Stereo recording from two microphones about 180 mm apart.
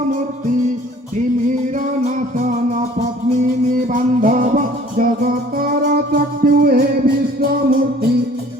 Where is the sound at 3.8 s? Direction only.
45° right (ahead or behind).